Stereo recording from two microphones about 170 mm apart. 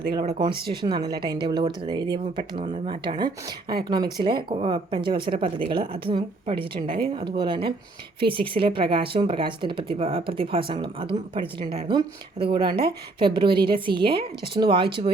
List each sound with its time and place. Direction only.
0.3 s speech: 25° right (ahead or behind)